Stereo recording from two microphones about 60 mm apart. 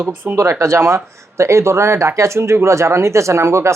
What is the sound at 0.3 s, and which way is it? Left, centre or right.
Speech, right.